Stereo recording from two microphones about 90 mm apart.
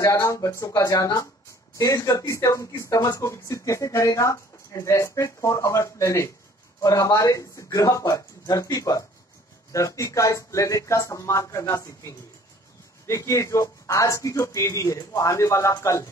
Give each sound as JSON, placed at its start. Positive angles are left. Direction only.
{"t": 0.0, "sound": "speech", "side_deg": 35}